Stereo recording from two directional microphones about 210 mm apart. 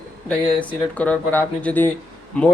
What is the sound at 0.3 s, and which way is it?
Speech, 5° left (ahead or behind).